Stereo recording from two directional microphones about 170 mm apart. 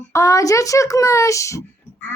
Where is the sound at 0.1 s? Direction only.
20° left (ahead or behind).